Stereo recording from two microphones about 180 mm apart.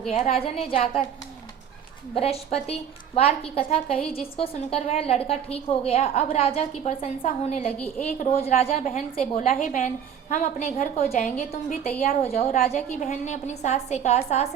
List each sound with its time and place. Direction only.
0.1 s a woman's voice: 35° left (ahead or behind)
2.1 s a woman's voice: 35° left (ahead or behind)